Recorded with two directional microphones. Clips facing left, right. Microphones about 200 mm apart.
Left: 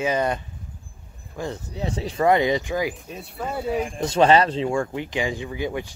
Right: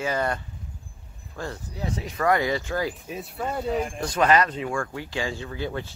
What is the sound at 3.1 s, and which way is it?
Speech, centre (ahead or behind).